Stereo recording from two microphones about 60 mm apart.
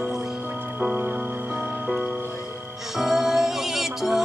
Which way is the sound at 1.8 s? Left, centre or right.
Centre.